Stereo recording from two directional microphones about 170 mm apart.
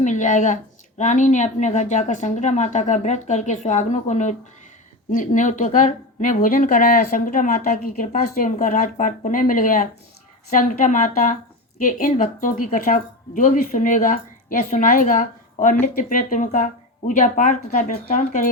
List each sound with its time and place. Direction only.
0.0 s speech: 45° left (ahead or behind)